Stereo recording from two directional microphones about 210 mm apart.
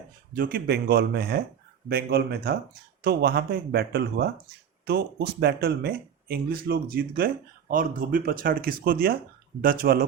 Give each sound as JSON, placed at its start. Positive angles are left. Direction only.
{"t": 0.3, "sound": "speech", "side_deg": -45}